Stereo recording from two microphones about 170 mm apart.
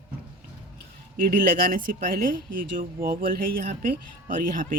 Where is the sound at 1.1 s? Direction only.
60° right (ahead or behind).